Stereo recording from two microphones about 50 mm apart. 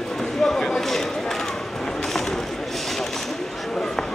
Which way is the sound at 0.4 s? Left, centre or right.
Centre.